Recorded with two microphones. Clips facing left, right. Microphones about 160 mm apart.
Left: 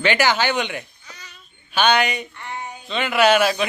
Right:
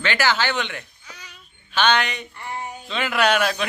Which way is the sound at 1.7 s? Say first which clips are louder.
Left 2 dB; 10° left (ahead or behind).